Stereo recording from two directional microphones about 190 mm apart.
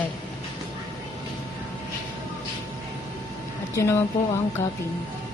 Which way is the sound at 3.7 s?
15° left (ahead or behind).